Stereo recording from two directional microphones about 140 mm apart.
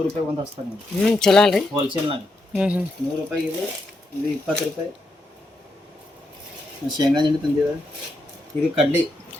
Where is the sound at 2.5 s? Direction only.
10° right (ahead or behind).